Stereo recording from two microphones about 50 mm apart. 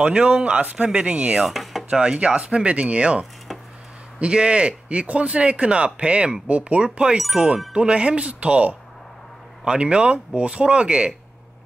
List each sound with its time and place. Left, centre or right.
0.0 s speech: right
1.4 s chopping: centre
1.9 s speech: centre